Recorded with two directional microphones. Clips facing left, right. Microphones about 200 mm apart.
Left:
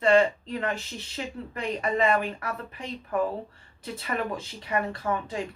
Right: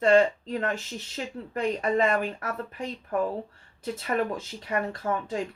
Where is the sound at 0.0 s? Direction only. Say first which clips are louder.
Right 1 dB; 45° right (ahead or behind).